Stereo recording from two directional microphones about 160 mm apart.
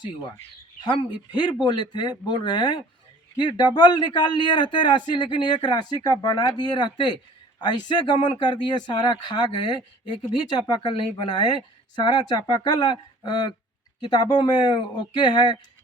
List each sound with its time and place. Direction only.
0.9 s a man's voice: 30° left (ahead or behind)